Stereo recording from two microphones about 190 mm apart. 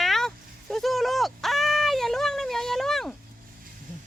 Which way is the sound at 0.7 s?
Centre (ahead or behind).